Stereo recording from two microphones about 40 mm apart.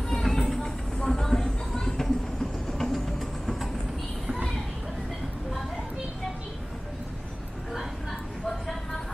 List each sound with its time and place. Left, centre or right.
0.1 s vehicle: centre
1.0 s a sound: centre
1.8 s vehicle: centre
2.8 s vehicle: centre
8.5 s vehicle: centre